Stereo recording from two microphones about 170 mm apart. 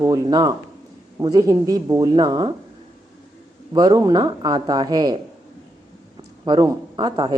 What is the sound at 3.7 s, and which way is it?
Speech, 25° right (ahead or behind).